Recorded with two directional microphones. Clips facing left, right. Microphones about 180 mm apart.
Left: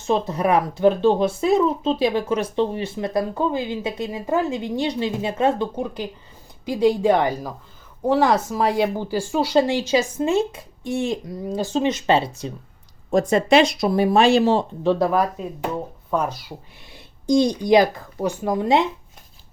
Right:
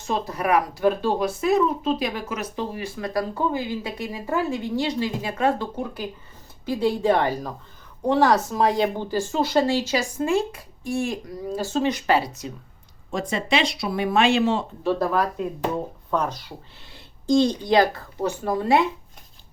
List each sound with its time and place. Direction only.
0.1 s a woman's voice: 25° left (ahead or behind)
13.1 s speech: 45° left (ahead or behind)
14.8 s a woman's voice: 15° left (ahead or behind)